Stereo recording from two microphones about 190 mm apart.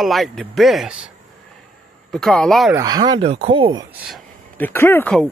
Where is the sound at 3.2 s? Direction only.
30° right (ahead or behind).